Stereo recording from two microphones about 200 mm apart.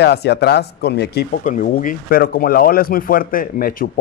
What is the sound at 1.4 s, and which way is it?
Speech, 40° left (ahead or behind).